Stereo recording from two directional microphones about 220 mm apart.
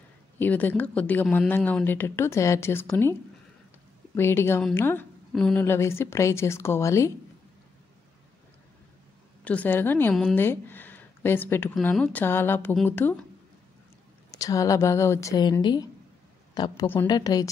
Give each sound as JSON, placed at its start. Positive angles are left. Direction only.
{"t": 0.4, "sound": "a woman's voice", "side_deg": 10}
{"t": 9.4, "sound": "a woman's voice", "side_deg": 5}
{"t": 14.3, "sound": "a woman's voice", "side_deg": 15}